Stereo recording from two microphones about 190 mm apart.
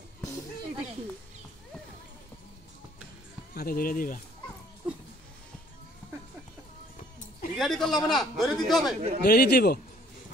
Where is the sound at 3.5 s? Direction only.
50° left (ahead or behind).